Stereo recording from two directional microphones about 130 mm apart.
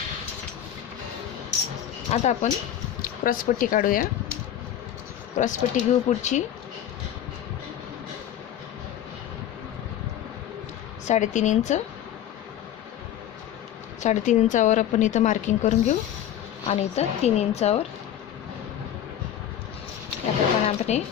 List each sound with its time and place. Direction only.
2.0 s a woman's voice: 60° left (ahead or behind)
3.0 s speech: 90° left
5.4 s a woman's voice: 75° left (ahead or behind)
11.0 s a woman's voice: 65° left (ahead or behind)
14.0 s a woman's voice: 70° left (ahead or behind)
16.6 s a woman's voice: 55° left (ahead or behind)
20.7 s a woman's voice: 60° left (ahead or behind)